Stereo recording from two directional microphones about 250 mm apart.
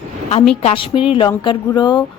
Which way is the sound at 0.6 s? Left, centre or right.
Left.